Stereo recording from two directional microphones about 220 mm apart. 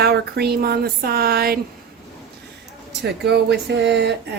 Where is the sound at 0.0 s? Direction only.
45° right (ahead or behind).